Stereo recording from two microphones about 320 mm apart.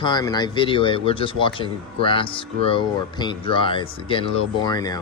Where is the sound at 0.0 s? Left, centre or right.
Centre.